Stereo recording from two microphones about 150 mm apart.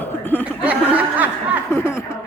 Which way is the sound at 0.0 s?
10° left (ahead or behind).